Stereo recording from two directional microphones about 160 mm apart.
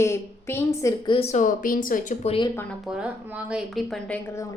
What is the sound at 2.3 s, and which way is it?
Speech, 30° left (ahead or behind).